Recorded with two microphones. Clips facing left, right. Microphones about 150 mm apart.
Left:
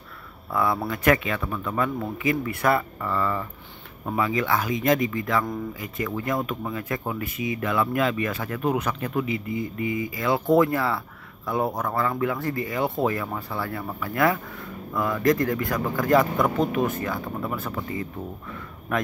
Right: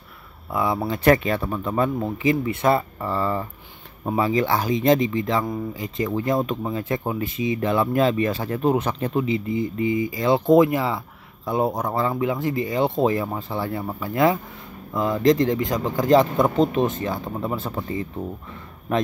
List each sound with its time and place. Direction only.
0.5 s speech: 15° right (ahead or behind)
10.5 s speech: 15° right (ahead or behind)